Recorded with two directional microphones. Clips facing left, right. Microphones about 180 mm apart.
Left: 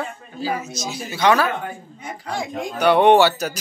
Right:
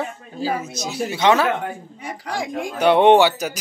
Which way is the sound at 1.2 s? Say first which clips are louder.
Even; 25° right (ahead or behind).